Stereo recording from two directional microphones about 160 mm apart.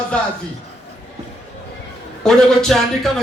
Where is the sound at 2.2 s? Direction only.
Centre (ahead or behind).